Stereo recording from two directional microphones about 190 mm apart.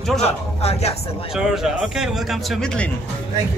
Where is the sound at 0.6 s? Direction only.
35° left (ahead or behind).